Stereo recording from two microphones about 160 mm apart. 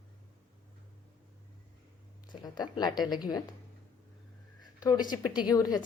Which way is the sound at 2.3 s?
25° left (ahead or behind).